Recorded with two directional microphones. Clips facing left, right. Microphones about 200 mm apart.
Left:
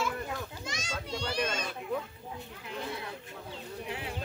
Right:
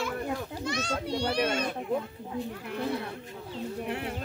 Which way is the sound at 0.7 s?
60° right (ahead or behind).